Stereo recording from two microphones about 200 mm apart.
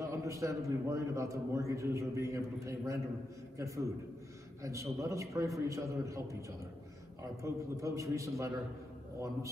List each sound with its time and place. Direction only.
0.0 s a man's voice: 15° right (ahead or behind)
7.4 s a man's voice: 15° right (ahead or behind)